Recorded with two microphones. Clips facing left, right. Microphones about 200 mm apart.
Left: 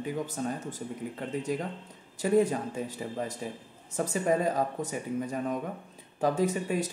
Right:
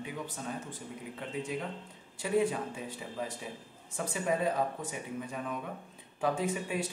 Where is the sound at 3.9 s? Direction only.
40° left (ahead or behind).